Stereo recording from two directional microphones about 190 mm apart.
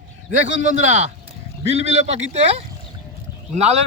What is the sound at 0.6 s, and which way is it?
Speech, 40° right (ahead or behind).